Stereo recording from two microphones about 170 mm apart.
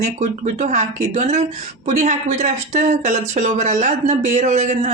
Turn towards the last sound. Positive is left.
turn(degrees=-45)  # may be behind; listen again after turning